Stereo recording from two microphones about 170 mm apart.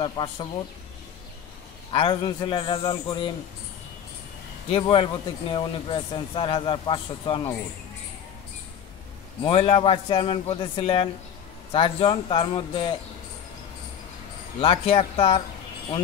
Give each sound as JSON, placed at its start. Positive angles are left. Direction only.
{"t": 0.0, "sound": "a man's voice", "side_deg": 25}
{"t": 1.9, "sound": "a man's voice", "side_deg": 30}
{"t": 4.6, "sound": "a man's voice", "side_deg": 30}
{"t": 9.4, "sound": "a man's voice", "side_deg": 35}
{"t": 14.6, "sound": "a man's voice", "side_deg": 30}